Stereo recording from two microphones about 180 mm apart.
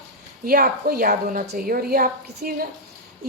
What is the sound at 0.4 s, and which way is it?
A woman's voice, 55° right (ahead or behind).